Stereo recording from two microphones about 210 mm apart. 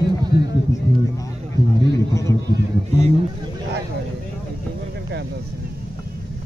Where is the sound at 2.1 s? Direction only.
15° left (ahead or behind).